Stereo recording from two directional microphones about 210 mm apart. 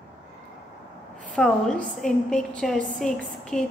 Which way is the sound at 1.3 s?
5° left (ahead or behind).